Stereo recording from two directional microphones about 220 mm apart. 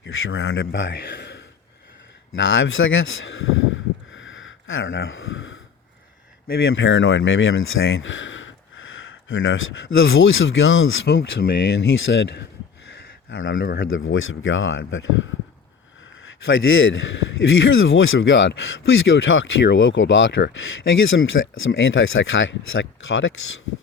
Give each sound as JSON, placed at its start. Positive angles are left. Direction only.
{"t": 0.0, "sound": "speech", "side_deg": 65}
{"t": 2.3, "sound": "a sound", "side_deg": 60}
{"t": 6.6, "sound": "speech", "side_deg": 65}
{"t": 11.1, "sound": "speech", "side_deg": 55}
{"t": 16.5, "sound": "speech", "side_deg": 65}